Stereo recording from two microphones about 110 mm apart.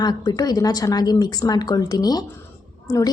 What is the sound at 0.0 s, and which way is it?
A woman's voice, 40° left (ahead or behind).